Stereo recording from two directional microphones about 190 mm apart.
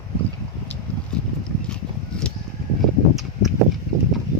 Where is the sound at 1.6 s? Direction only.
5° left (ahead or behind).